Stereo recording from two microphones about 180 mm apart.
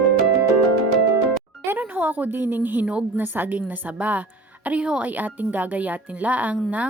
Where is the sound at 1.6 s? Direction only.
10° right (ahead or behind).